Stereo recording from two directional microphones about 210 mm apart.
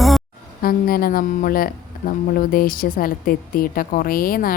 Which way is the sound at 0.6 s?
45° left (ahead or behind).